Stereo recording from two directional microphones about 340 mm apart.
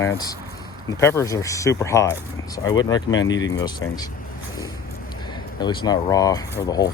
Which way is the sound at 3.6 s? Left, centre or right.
Centre.